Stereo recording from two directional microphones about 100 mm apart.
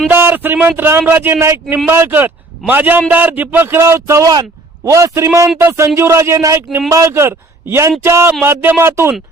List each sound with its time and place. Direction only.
0.1 s a man's voice: 20° right (ahead or behind)